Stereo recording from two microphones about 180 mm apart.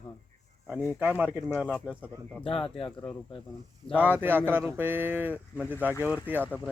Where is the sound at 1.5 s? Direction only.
5° left (ahead or behind).